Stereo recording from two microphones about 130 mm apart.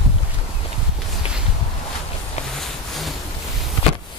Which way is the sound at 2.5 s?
Centre (ahead or behind).